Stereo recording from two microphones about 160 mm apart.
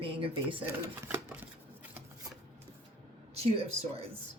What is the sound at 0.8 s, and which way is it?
Speech, 10° right (ahead or behind).